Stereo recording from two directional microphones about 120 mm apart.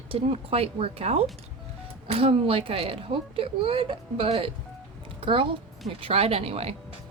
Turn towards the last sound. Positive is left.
turn(degrees=-55)  # may be behind; listen again after turning